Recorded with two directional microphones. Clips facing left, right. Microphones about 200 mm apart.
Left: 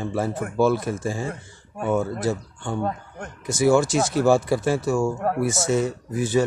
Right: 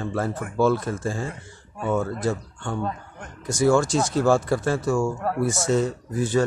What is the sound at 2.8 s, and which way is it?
Speech, 50° left (ahead or behind).